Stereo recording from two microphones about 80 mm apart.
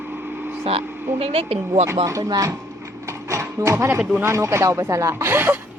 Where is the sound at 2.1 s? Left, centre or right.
Right.